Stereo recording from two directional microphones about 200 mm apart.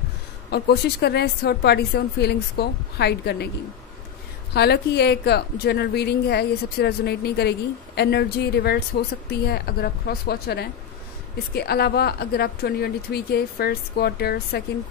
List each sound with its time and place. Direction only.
0.5 s speech: 55° left (ahead or behind)
4.6 s a woman's voice: 55° left (ahead or behind)